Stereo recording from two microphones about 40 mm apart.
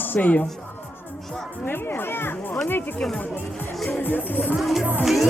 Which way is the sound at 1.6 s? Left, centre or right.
Left.